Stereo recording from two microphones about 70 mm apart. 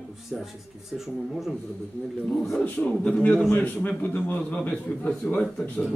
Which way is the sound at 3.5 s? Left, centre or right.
Left.